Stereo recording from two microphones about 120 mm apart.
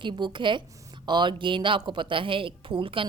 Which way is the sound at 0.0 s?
40° right (ahead or behind).